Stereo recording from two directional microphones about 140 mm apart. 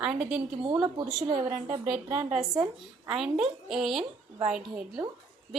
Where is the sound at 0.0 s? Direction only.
5° right (ahead or behind).